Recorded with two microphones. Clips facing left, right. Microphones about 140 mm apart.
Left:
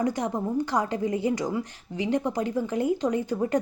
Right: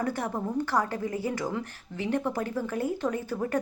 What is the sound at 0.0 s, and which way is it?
A woman's voice, 15° left (ahead or behind).